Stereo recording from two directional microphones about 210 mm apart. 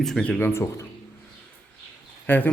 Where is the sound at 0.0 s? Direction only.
Centre (ahead or behind).